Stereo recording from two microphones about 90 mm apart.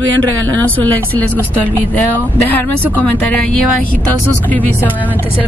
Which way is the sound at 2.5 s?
20° left (ahead or behind).